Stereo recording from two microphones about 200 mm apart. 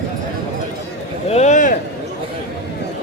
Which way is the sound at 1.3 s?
35° left (ahead or behind).